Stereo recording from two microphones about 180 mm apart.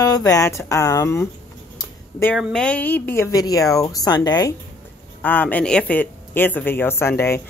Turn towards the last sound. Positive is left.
turn(degrees=15)  # may be behind; listen again after turning